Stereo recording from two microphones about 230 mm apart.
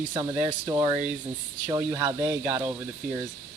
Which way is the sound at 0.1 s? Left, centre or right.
Centre.